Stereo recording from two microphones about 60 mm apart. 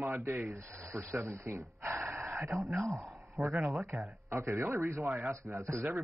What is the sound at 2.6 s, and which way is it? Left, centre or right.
Speech, centre.